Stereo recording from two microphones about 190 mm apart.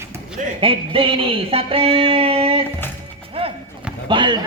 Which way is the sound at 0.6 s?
30° right (ahead or behind).